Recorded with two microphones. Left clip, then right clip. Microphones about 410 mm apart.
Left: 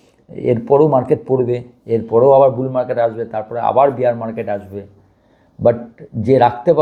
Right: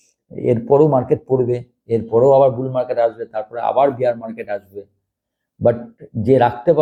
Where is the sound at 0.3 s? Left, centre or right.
Centre.